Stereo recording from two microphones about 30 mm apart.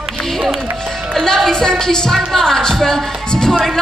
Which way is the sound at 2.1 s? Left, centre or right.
Centre.